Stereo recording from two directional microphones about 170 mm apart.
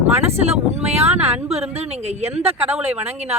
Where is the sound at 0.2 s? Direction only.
40° right (ahead or behind).